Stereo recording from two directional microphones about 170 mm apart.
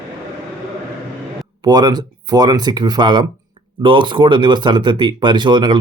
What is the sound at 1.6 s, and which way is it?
Speech, 25° right (ahead or behind).